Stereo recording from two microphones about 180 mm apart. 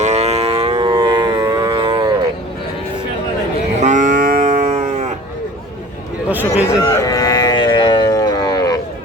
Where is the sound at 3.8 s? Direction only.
45° right (ahead or behind).